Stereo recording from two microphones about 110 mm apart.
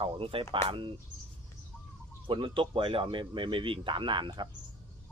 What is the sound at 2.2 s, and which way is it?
Speech, 50° right (ahead or behind).